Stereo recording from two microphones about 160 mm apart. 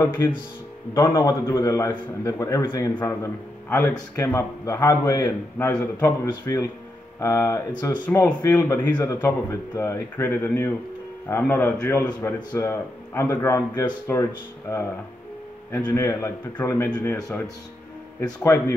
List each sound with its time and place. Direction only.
0.0 s a man's voice: 30° left (ahead or behind)
5.7 s speech: 10° left (ahead or behind)
6.4 s a man's voice: 20° left (ahead or behind)
7.7 s a man's voice: 25° left (ahead or behind)
8.1 s a man's voice: 15° left (ahead or behind)